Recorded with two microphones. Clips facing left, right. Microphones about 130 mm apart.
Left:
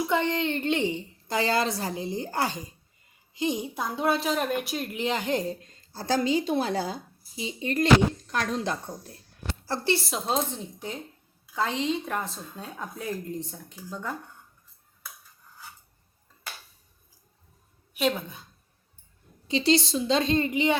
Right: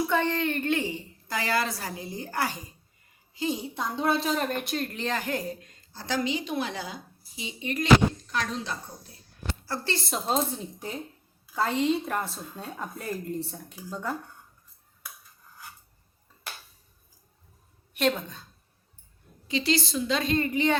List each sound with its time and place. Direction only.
0.1 s a woman's voice: 20° left (ahead or behind); by 7.9 s 35° left (ahead or behind)
8.3 s speech: 50° left (ahead or behind)
10.0 s a woman's voice: centre (ahead or behind)
17.9 s a woman's voice: 5° left (ahead or behind)
19.5 s a woman's voice: 25° left (ahead or behind)